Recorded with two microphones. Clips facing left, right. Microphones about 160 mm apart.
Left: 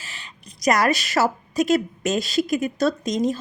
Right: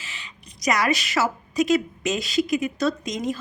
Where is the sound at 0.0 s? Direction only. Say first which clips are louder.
Even; 40° left (ahead or behind).